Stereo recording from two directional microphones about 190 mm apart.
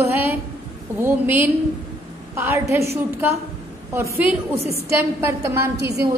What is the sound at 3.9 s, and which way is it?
A woman's voice, 15° right (ahead or behind).